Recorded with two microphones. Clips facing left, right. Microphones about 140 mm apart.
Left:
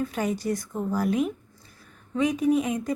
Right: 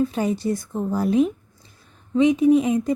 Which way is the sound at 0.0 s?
30° right (ahead or behind).